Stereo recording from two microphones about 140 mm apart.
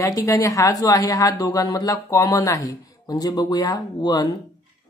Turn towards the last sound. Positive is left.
turn(degrees=25)  # may be behind; listen again after turning